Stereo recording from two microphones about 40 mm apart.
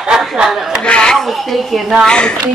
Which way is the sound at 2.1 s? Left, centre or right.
Left.